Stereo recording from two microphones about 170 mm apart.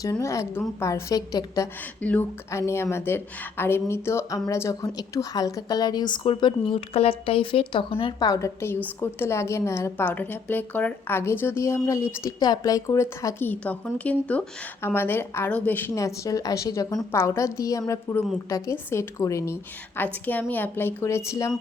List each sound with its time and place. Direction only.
0.0 s a woman's voice: 20° left (ahead or behind)
2.0 s speech: 10° left (ahead or behind)